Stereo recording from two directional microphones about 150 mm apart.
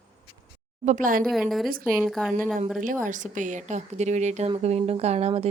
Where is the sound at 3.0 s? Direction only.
60° right (ahead or behind).